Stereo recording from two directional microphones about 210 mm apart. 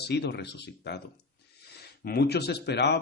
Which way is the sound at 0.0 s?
50° left (ahead or behind).